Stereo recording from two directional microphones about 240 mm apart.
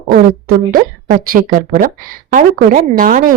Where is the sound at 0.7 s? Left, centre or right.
Right.